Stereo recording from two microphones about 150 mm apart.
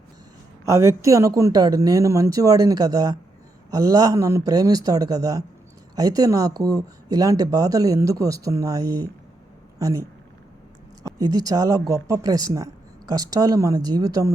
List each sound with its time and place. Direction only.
0.6 s speech: 20° right (ahead or behind)